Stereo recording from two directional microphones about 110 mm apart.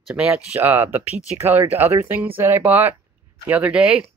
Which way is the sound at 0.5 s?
20° right (ahead or behind).